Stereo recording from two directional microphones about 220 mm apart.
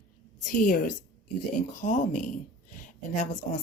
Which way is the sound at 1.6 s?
35° left (ahead or behind).